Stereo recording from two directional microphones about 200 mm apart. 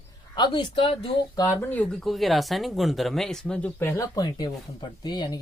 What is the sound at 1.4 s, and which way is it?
Speech, 10° left (ahead or behind).